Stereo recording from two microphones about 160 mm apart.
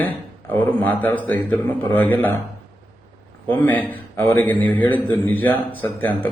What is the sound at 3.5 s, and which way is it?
A man's voice, 10° left (ahead or behind).